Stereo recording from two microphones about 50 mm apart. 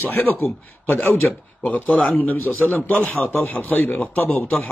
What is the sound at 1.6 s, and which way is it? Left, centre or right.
A man's voice, left.